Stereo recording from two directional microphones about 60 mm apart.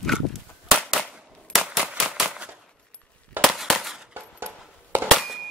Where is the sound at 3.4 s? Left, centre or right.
Centre.